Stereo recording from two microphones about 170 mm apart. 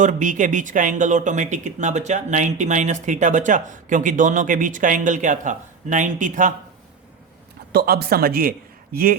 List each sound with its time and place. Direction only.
0.0 s speech: 50° right (ahead or behind)
7.7 s a man's voice: 65° right (ahead or behind)